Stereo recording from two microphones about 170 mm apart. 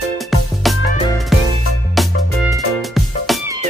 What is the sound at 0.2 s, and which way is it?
Music, centre (ahead or behind).